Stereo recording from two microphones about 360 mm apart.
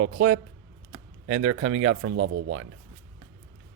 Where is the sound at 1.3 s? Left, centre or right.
Right.